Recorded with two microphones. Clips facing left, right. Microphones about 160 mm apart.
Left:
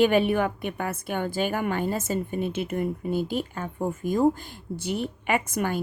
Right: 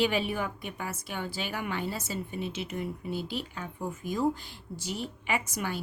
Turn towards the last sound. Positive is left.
turn(degrees=50)  # may be behind; listen again after turning